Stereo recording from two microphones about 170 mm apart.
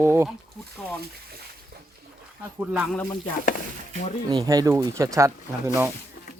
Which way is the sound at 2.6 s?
10° right (ahead or behind).